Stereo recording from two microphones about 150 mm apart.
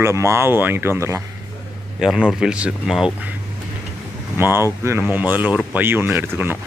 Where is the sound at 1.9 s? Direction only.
5° right (ahead or behind).